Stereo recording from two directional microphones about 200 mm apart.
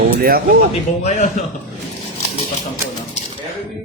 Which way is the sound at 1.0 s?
35° left (ahead or behind).